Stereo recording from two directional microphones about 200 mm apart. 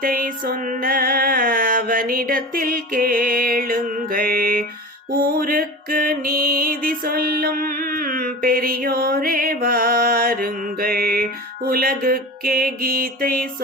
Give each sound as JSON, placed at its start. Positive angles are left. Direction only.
{"t": 0.0, "sound": "music", "side_deg": -45}